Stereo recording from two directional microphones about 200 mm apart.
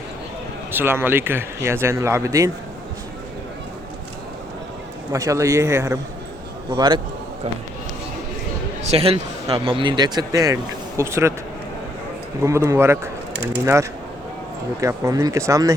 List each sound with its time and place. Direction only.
0.7 s a man's voice: 10° right (ahead or behind)
5.1 s a man's voice: 15° right (ahead or behind)
8.8 s a man's voice: 30° right (ahead or behind); by 11.3 s 15° right (ahead or behind)
12.4 s a man's voice: 15° right (ahead or behind)
14.8 s a man's voice: 15° right (ahead or behind)